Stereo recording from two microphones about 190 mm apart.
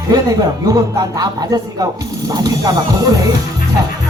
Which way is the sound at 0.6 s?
20° right (ahead or behind).